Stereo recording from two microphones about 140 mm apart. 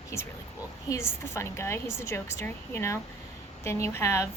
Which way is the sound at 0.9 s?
20° left (ahead or behind).